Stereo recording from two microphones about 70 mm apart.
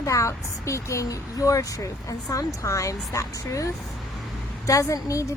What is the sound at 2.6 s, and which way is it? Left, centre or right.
A woman's voice, left.